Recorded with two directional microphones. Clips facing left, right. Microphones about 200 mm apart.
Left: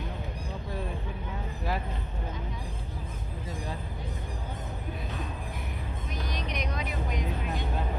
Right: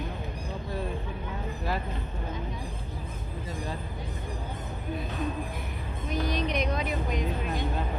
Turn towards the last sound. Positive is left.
turn(degrees=-25)  # may be behind; listen again after turning